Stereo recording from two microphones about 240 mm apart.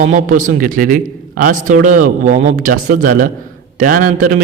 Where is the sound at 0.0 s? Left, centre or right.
Right.